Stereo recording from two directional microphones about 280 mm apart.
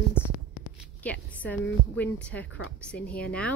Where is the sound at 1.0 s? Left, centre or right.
Centre.